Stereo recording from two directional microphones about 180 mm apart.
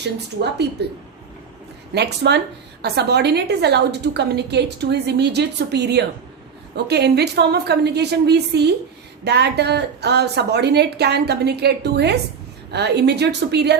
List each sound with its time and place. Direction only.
0.8 s a woman's voice: 65° right (ahead or behind)